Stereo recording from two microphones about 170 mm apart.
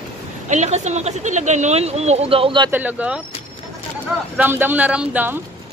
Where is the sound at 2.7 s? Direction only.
10° right (ahead or behind).